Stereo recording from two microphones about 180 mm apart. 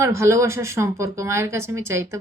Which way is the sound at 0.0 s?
15° right (ahead or behind).